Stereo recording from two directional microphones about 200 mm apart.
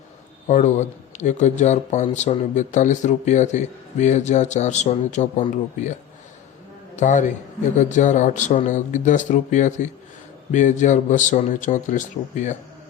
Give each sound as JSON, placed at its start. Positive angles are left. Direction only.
{"t": 0.4, "sound": "a man's voice", "side_deg": 35}